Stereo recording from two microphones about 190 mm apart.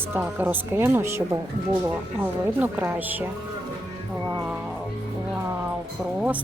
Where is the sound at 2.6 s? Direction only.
10° right (ahead or behind).